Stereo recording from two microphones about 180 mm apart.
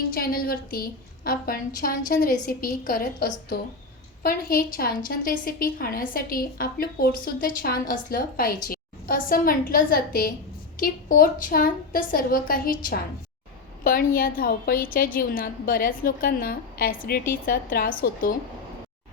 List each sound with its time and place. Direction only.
0.1 s a woman's voice: 55° left (ahead or behind)